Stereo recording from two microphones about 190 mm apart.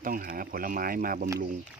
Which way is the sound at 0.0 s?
50° right (ahead or behind).